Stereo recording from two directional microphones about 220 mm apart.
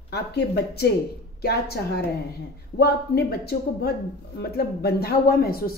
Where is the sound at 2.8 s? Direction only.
45° left (ahead or behind).